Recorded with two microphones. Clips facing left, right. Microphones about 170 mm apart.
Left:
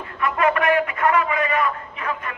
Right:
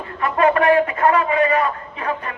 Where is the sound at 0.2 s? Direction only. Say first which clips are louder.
Right 4 dB; 35° right (ahead or behind).